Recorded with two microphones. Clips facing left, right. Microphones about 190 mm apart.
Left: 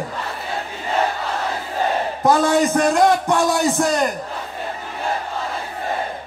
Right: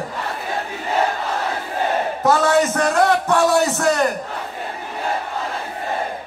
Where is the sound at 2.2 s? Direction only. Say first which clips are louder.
Left 1 dB; 15° left (ahead or behind).